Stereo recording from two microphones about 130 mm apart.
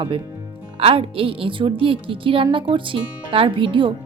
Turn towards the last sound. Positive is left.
turn(degrees=-40)  # may be behind; listen again after turning